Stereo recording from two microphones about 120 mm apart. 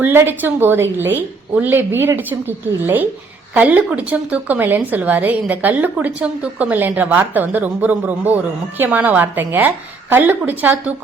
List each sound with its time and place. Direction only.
0.0 s a woman's voice: 20° right (ahead or behind)